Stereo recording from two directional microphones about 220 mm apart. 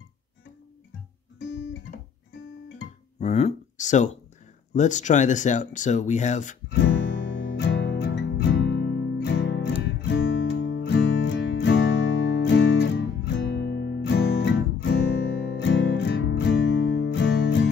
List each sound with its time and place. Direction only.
3.2 s a sound: 30° left (ahead or behind)
4.7 s speech: 35° left (ahead or behind)
6.7 s music: 55° left (ahead or behind)